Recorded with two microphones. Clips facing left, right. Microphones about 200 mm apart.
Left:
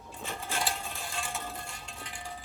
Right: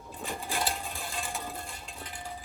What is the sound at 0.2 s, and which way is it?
Sewing machine, 15° right (ahead or behind).